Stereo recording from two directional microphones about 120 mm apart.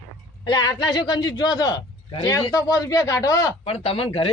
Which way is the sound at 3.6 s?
55° left (ahead or behind).